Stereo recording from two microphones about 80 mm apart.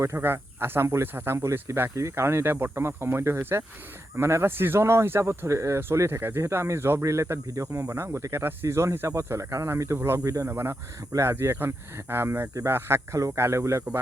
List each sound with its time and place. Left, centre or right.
0.0 s speech: right
10.5 s speech: right